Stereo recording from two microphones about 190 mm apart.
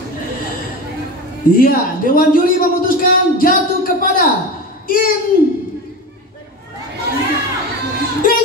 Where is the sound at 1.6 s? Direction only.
50° left (ahead or behind).